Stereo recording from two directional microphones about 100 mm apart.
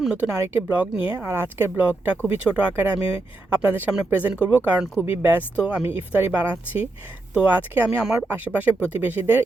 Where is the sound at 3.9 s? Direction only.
10° right (ahead or behind).